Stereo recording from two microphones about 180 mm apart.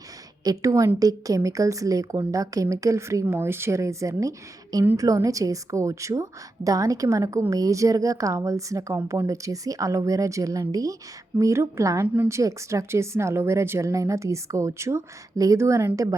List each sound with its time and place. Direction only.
0.4 s a woman's voice: 20° right (ahead or behind)